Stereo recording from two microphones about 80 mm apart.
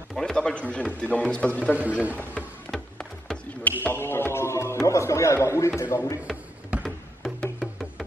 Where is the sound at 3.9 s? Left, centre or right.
Left.